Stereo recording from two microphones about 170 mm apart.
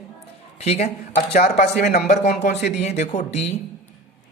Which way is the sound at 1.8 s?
60° left (ahead or behind).